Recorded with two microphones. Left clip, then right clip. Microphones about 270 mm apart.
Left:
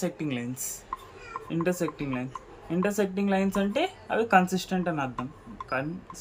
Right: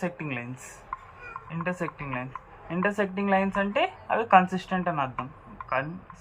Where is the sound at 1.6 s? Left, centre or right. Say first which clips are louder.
Left 1 dB; left.